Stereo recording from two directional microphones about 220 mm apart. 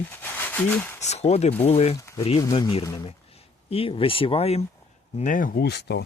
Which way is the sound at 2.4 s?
15° left (ahead or behind).